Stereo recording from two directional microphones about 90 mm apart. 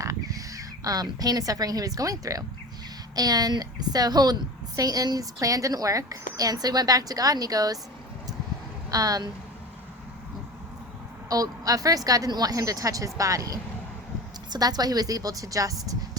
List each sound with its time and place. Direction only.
0.0 s a woman's voice: 40° right (ahead or behind)
8.9 s a woman's voice: 45° right (ahead or behind)
11.3 s a woman's voice: 40° right (ahead or behind)